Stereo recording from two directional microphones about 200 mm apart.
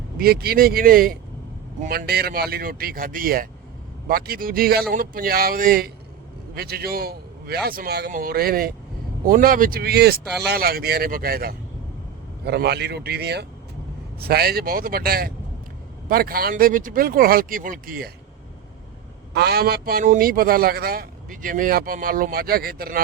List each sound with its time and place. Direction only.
0.2 s a man's voice: 50° right (ahead or behind)
19.3 s a man's voice: 55° right (ahead or behind)